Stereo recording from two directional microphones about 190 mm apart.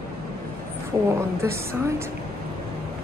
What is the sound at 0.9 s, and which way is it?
Speech, 15° right (ahead or behind).